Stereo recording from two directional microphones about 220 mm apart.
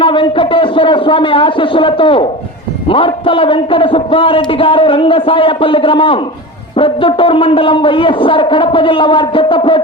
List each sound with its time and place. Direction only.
0.0 s a man's voice: 20° left (ahead or behind)